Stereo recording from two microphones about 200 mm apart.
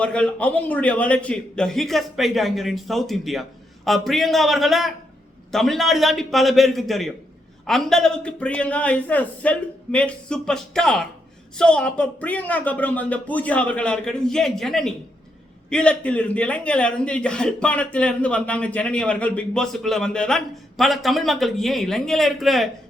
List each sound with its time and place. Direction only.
0.0 s a man's voice: 5° left (ahead or behind)